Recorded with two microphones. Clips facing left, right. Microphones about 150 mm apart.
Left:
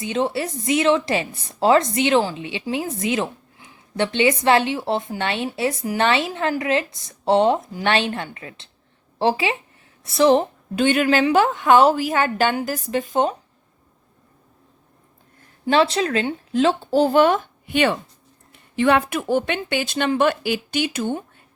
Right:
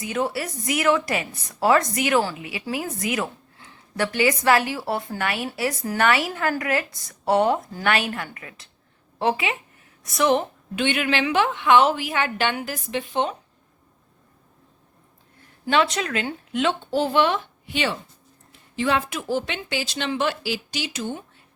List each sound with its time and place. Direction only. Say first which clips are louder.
0.0 s a woman's voice: left 3 dB; 25° left (ahead or behind); by 13.3 s 40° left (ahead or behind)
15.7 s a woman's voice: left 4 dB; 30° left (ahead or behind); by 21.2 s 55° left (ahead or behind)